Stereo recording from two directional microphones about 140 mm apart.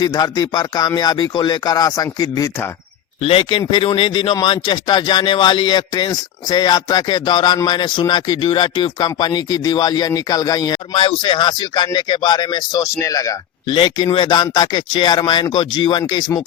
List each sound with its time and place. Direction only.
0.0 s speech: 30° left (ahead or behind)
3.2 s speech: 40° left (ahead or behind)
10.9 s speech: 40° left (ahead or behind)
13.7 s speech: 35° left (ahead or behind)